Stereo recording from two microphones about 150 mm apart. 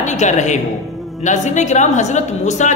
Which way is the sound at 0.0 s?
50° left (ahead or behind).